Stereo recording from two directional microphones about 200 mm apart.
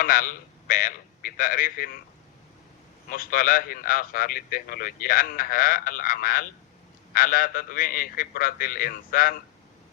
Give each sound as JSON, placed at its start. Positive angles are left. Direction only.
{"t": 0.0, "sound": "a man's voice", "side_deg": 45}
{"t": 3.1, "sound": "a man's voice", "side_deg": 45}